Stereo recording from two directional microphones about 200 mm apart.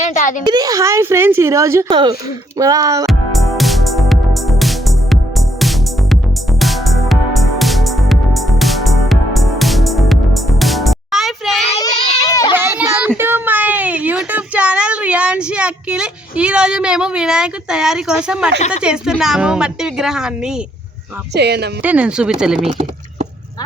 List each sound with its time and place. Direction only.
0.0 s a child's voice: 40° left (ahead or behind)
0.4 s speech: 20° right (ahead or behind)
3.1 s music: centre (ahead or behind)
12.3 s a sound: 20° left (ahead or behind)
12.5 s child singing: 10° right (ahead or behind)
13.1 s a sound: 10° right (ahead or behind)
18.8 s a woman's voice: 5° right (ahead or behind)
21.3 s speech: 55° right (ahead or behind)
21.8 s a woman's voice: 5° right (ahead or behind)